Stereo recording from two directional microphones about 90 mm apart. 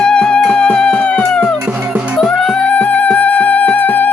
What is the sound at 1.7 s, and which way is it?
Music, 15° right (ahead or behind).